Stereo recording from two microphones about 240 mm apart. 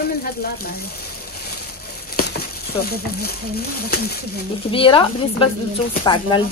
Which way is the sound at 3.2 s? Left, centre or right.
Left.